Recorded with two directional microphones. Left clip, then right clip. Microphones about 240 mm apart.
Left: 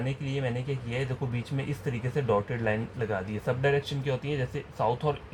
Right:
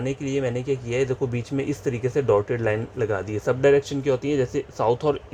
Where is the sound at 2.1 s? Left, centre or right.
Right.